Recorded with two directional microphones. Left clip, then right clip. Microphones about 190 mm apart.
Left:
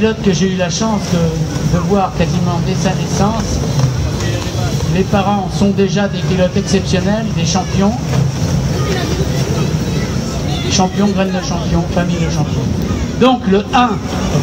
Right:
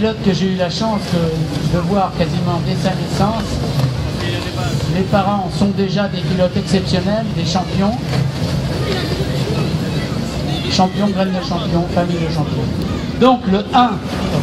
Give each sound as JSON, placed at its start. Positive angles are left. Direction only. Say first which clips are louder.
{"t": 0.0, "sound": "a man's voice", "louder": "left 3 dB", "side_deg": 30}
{"t": 6.7, "sound": "a man's voice", "louder": "left 2 dB", "side_deg": 30}
{"t": 10.7, "sound": "speech", "louder": "left 1 dB", "side_deg": 30}
{"t": 13.2, "sound": "a man's voice", "louder": "left 1 dB", "side_deg": 30}